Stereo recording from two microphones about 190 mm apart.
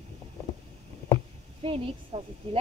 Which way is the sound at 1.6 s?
30° right (ahead or behind).